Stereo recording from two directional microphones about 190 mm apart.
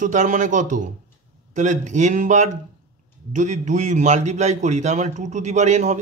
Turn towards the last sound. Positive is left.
turn(degrees=-35)  # may be behind; listen again after turning